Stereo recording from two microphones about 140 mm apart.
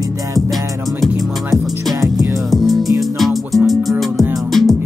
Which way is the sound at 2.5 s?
Centre (ahead or behind).